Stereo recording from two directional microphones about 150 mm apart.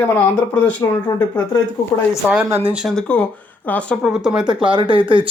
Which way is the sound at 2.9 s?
10° left (ahead or behind).